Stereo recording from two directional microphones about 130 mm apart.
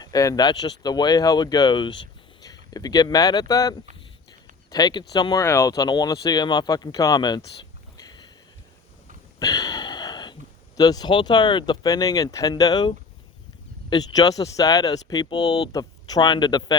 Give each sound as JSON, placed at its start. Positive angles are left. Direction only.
{"t": 0.0, "sound": "speech", "side_deg": 25}
{"t": 9.4, "sound": "a sound", "side_deg": 30}
{"t": 10.8, "sound": "speech", "side_deg": 30}
{"t": 13.9, "sound": "speech", "side_deg": 30}